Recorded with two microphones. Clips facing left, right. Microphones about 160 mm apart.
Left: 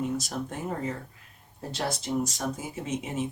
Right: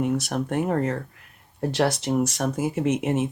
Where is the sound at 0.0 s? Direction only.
70° right (ahead or behind).